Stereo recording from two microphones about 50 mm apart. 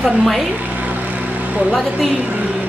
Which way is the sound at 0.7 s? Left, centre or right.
Right.